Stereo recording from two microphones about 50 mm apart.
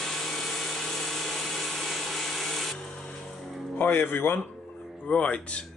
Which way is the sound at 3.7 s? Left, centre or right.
Left.